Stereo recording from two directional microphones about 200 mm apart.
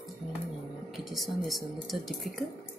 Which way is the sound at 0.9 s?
Centre (ahead or behind).